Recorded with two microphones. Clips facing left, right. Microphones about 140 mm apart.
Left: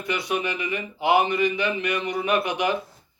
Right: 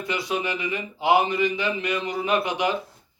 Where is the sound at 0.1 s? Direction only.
25° right (ahead or behind).